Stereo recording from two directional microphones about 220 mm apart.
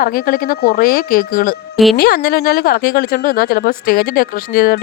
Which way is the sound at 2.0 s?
45° left (ahead or behind).